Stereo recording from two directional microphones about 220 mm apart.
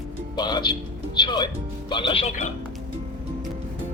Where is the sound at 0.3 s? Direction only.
20° left (ahead or behind).